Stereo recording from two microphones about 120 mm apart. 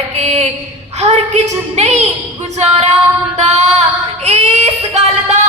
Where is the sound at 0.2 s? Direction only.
65° right (ahead or behind).